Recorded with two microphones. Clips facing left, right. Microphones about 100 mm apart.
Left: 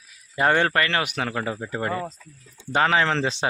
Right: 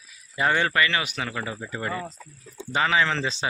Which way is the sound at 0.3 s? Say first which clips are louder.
Left 2 dB; 50° left (ahead or behind).